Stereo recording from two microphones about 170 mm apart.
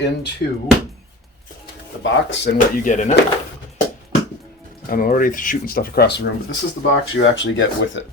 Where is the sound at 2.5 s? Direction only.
55° left (ahead or behind).